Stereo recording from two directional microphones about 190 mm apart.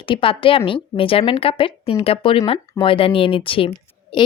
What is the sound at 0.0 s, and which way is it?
A woman's voice, 25° left (ahead or behind).